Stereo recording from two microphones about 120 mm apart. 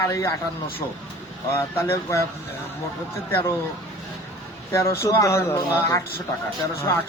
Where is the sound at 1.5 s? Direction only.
20° left (ahead or behind).